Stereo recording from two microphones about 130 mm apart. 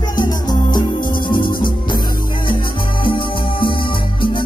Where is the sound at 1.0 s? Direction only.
90° left.